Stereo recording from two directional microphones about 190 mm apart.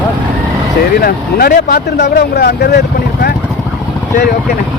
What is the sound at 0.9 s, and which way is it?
Speech, 55° left (ahead or behind).